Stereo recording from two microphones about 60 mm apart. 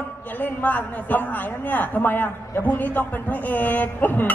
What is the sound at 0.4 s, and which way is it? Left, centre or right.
A man's voice, left.